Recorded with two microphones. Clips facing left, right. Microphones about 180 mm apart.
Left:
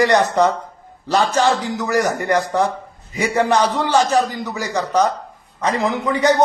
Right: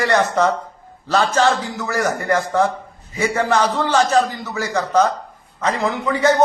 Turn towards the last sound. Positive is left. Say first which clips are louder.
# even
turn(degrees=15)  # may be behind; listen again after turning